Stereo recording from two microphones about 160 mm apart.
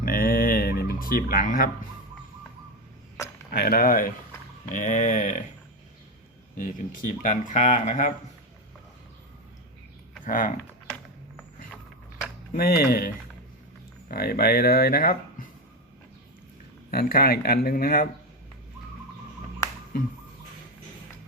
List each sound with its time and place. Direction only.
0.0 s dog: 65° left (ahead or behind)
3.5 s speech: 70° left (ahead or behind); by 5.4 s 50° left (ahead or behind)
6.6 s speech: 60° left (ahead or behind)
10.2 s speech: 55° left (ahead or behind)
12.5 s speech: 70° left (ahead or behind)
14.1 s speech: 75° left (ahead or behind)
16.9 s speech: 70° left (ahead or behind)